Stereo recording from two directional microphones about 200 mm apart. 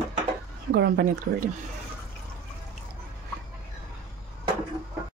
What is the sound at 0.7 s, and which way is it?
Speech, 55° right (ahead or behind).